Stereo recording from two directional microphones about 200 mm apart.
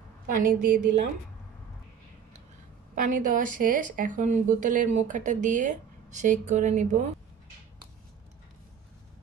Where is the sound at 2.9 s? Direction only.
40° right (ahead or behind).